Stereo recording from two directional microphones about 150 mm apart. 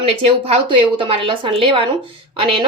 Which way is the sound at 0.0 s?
40° right (ahead or behind).